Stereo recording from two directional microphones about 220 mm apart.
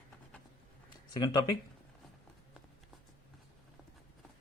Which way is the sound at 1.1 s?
20° left (ahead or behind).